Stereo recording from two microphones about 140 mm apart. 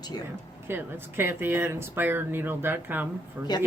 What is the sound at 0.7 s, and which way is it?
Speech, 15° right (ahead or behind).